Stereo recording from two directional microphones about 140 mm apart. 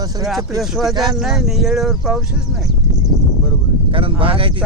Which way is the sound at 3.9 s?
40° right (ahead or behind).